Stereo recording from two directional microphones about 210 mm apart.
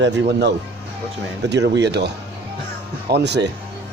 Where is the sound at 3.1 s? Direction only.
55° right (ahead or behind).